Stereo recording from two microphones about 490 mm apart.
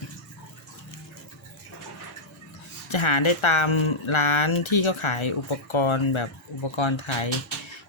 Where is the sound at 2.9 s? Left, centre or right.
Left.